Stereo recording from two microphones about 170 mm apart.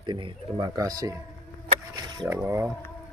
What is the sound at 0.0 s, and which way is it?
Speech, 25° right (ahead or behind).